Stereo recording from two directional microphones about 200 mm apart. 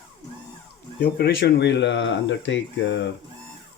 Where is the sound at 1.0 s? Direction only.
55° left (ahead or behind).